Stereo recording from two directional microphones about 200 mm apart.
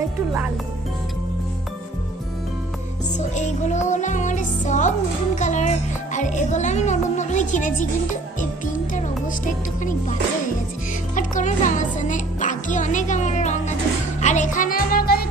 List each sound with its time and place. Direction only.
3.2 s music: 35° left (ahead or behind)
6.1 s speech: 35° left (ahead or behind)
11.1 s speech: 40° left (ahead or behind)
14.2 s music: 35° left (ahead or behind)